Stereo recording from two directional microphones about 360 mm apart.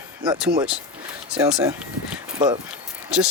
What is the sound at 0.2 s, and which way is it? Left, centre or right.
Speech, centre.